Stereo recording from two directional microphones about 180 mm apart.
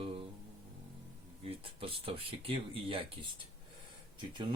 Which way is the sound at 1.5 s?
30° right (ahead or behind).